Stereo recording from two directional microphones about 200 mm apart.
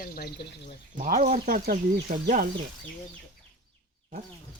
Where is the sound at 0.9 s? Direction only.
40° right (ahead or behind).